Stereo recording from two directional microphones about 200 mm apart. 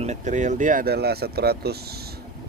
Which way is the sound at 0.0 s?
35° right (ahead or behind).